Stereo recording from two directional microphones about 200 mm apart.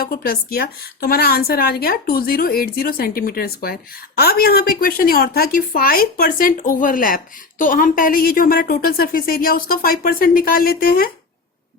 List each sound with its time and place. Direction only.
0.0 s a woman's voice: 50° left (ahead or behind)